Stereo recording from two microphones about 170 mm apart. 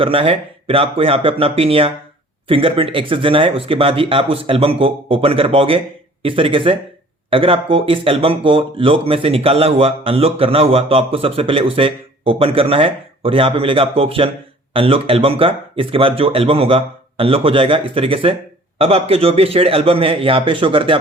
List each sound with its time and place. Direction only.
0.0 s speech: 30° right (ahead or behind)